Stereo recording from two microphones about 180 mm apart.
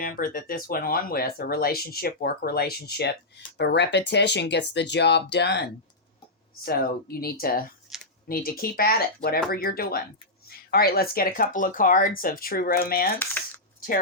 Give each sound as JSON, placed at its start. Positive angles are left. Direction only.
{"t": 0.0, "sound": "speech", "side_deg": 50}
{"t": 6.7, "sound": "speech", "side_deg": 55}
{"t": 7.9, "sound": "computer keyboard", "side_deg": 0}
{"t": 8.3, "sound": "speech", "side_deg": 55}